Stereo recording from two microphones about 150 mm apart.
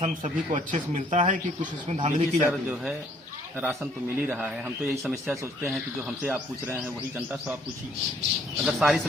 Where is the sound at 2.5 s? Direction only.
5° right (ahead or behind).